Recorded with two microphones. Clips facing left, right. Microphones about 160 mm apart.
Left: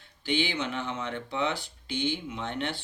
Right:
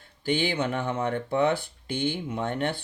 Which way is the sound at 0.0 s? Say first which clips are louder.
Right 3 dB; 50° right (ahead or behind).